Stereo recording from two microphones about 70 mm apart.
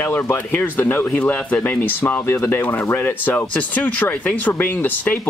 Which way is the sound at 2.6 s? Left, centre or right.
Left.